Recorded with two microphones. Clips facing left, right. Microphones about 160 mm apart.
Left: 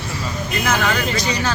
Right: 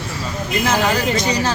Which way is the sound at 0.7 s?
30° right (ahead or behind).